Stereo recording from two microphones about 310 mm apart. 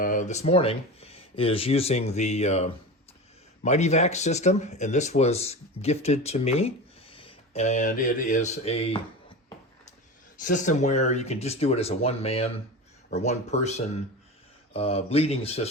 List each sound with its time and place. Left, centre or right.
0.0 s speech: left
10.4 s speech: left